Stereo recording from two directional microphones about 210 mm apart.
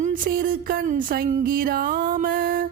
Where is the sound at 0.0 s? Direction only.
40° right (ahead or behind).